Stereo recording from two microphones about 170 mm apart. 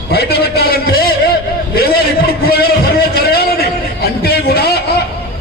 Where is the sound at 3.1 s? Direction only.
65° left (ahead or behind).